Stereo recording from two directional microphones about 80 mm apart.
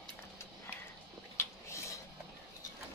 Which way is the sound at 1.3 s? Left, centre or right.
Left.